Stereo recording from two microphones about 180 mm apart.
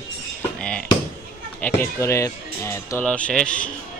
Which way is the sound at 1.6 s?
15° left (ahead or behind).